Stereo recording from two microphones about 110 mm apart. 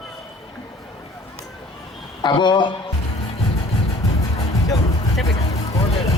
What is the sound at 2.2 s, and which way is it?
Speech, 45° left (ahead or behind).